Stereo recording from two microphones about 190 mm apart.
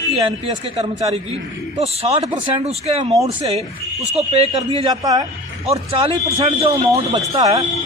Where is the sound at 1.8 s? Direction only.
35° right (ahead or behind).